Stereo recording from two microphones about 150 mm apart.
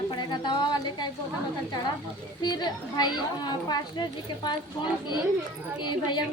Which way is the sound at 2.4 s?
30° left (ahead or behind).